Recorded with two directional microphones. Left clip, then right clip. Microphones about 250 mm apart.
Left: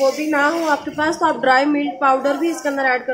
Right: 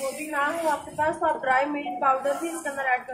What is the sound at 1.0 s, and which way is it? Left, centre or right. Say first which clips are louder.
A woman's voice: left 5 dB; left.